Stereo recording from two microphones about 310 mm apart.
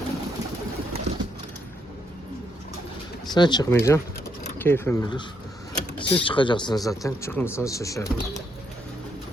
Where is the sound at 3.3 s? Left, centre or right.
Centre.